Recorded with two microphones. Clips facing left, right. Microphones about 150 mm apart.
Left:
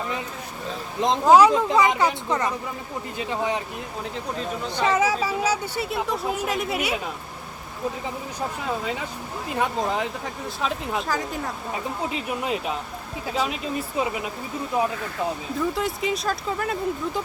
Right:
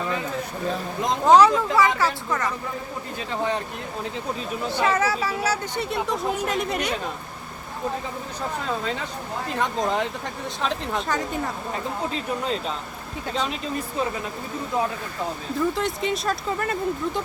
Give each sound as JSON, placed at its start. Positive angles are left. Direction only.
{"t": 1.2, "sound": "speech", "side_deg": 5}
{"t": 1.5, "sound": "speech", "side_deg": 20}
{"t": 4.7, "sound": "speech", "side_deg": 10}
{"t": 8.6, "sound": "speech", "side_deg": 10}
{"t": 12.1, "sound": "speech", "side_deg": 10}
{"t": 15.5, "sound": "speech", "side_deg": 0}